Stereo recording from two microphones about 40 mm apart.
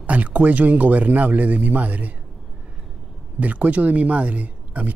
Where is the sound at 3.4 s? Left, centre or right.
Right.